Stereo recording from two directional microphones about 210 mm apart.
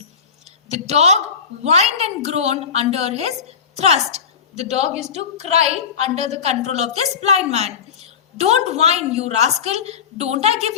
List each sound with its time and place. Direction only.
0.7 s a woman's voice: 30° right (ahead or behind)